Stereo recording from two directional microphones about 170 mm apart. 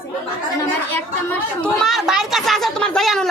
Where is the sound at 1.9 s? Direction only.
Centre (ahead or behind).